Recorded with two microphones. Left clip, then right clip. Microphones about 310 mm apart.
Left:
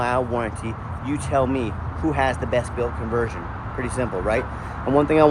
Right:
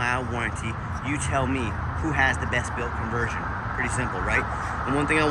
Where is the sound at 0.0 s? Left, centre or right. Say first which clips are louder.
Left 4 dB; centre.